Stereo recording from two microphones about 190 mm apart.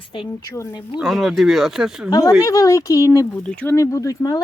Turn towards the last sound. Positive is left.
turn(degrees=20)  # may be behind; listen again after turning